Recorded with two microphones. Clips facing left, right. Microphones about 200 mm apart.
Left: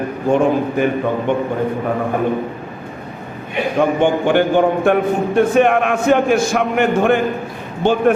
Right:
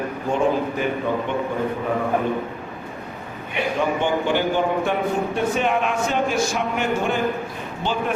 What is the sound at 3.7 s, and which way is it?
Speech, 55° left (ahead or behind).